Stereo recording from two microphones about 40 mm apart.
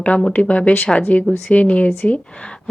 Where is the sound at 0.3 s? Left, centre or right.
Left.